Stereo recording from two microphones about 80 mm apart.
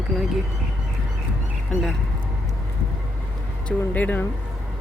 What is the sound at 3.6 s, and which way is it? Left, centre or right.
Speech, centre.